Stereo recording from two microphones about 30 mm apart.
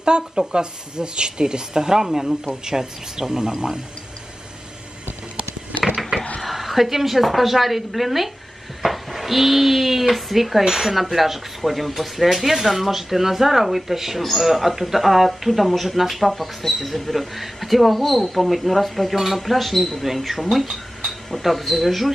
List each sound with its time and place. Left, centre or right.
0.0 s speech: right
6.4 s speech: centre